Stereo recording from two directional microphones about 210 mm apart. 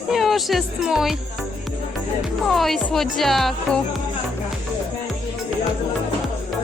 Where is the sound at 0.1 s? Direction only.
Centre (ahead or behind).